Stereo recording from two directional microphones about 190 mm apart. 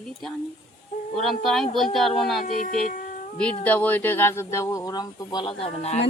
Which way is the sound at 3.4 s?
5° left (ahead or behind).